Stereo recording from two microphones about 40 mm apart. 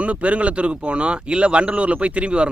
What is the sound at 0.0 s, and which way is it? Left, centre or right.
Speech, right.